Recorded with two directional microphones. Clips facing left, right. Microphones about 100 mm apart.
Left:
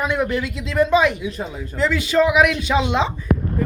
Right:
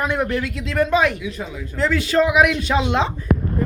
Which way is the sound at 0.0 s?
Centre (ahead or behind).